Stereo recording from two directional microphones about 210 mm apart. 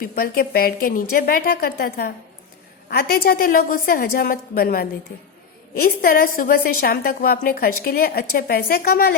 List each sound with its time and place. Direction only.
0.0 s a woman's voice: 45° left (ahead or behind)